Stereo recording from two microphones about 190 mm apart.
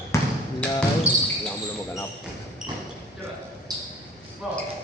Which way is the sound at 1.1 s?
5° right (ahead or behind).